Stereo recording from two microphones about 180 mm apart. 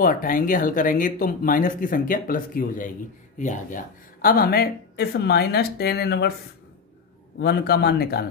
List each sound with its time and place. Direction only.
0.0 s speech: 50° left (ahead or behind)
7.3 s speech: 65° left (ahead or behind)